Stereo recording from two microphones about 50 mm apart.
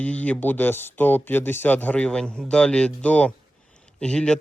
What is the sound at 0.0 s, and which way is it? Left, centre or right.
Speech, left.